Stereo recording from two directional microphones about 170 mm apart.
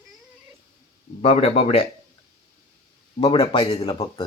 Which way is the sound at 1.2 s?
40° left (ahead or behind).